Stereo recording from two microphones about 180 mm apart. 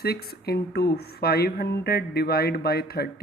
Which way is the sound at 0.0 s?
60° left (ahead or behind).